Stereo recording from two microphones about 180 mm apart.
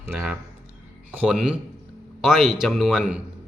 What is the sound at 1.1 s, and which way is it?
Mantra, 5° right (ahead or behind).